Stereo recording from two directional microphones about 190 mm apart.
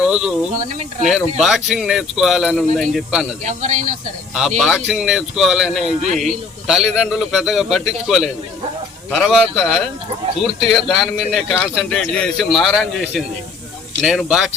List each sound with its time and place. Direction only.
0.0 s speech: 5° right (ahead or behind)
0.5 s speech: 40° right (ahead or behind)
1.4 s speech: centre (ahead or behind)
3.4 s speech: 40° right (ahead or behind)
4.4 s speech: centre (ahead or behind)